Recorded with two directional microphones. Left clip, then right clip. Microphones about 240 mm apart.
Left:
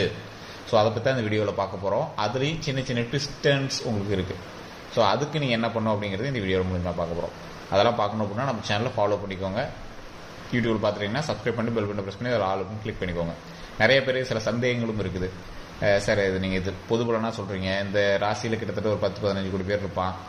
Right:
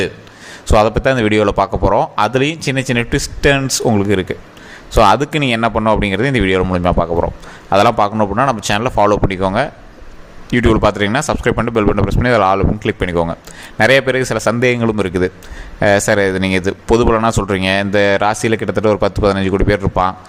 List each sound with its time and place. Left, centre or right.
0.7 s speech: right